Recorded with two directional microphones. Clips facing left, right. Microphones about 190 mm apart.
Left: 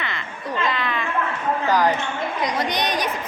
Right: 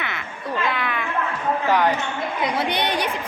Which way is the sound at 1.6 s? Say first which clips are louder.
Even; 5° right (ahead or behind).